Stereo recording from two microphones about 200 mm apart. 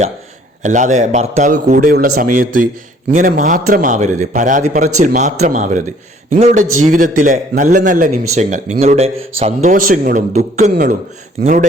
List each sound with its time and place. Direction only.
0.6 s speech: 40° right (ahead or behind)